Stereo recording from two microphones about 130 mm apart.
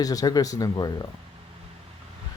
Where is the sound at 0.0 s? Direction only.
30° left (ahead or behind).